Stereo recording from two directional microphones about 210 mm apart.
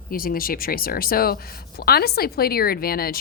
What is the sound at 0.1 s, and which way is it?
Speech, 45° left (ahead or behind).